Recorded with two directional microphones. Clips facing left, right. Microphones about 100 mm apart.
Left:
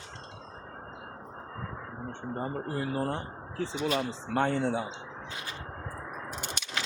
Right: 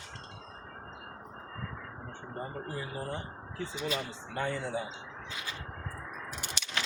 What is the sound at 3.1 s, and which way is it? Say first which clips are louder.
Speech: left 4 dB; 75° left (ahead or behind).